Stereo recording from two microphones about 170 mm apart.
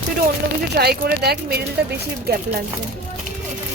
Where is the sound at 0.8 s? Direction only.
70° right (ahead or behind).